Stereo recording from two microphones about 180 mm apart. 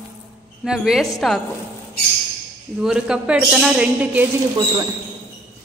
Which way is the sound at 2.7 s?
5° right (ahead or behind).